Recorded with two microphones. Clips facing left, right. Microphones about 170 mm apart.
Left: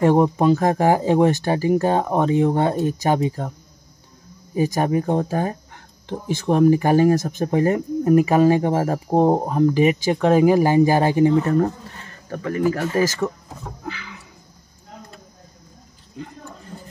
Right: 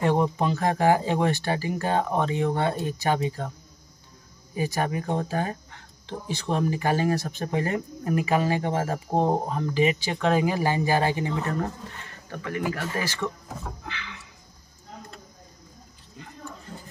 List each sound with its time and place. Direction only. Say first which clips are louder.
0.0 s speech: left 7 dB; 45° left (ahead or behind)
4.6 s speech: left 7 dB; 40° left (ahead or behind)
12.3 s speech: left 8 dB; 40° left (ahead or behind)